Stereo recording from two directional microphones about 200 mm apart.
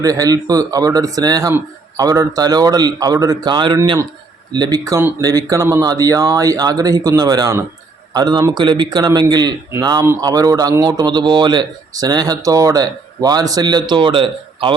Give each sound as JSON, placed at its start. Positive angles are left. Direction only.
{"t": 0.0, "sound": "a man's voice", "side_deg": -15}